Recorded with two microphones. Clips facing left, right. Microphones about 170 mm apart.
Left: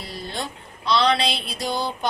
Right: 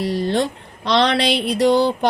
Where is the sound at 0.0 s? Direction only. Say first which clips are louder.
Right 12 dB; 75° right (ahead or behind).